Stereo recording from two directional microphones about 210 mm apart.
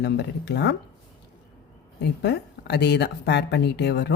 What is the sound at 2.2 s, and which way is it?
Speech, 55° left (ahead or behind).